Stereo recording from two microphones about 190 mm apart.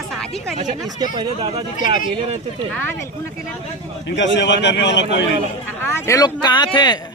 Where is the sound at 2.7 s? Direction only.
10° left (ahead or behind).